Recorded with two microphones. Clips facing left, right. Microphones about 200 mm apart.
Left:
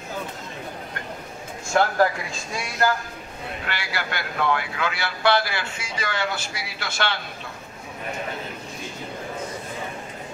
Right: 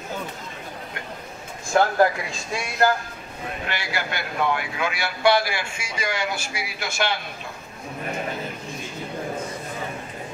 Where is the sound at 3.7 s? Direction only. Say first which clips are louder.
Right 1 dB; 20° right (ahead or behind).